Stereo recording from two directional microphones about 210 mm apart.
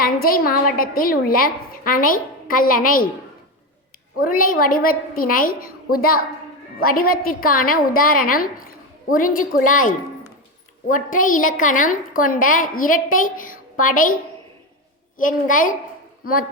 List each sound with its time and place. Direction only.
0.0 s a woman's voice: 45° left (ahead or behind)
4.2 s a woman's voice: 40° left (ahead or behind)
15.2 s a woman's voice: 40° left (ahead or behind)